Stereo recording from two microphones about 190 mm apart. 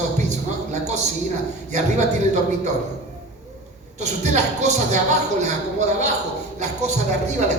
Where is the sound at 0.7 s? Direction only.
35° right (ahead or behind).